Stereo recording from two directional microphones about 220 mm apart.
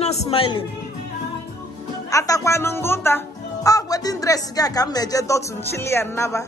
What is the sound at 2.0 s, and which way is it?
Speech, 15° left (ahead or behind).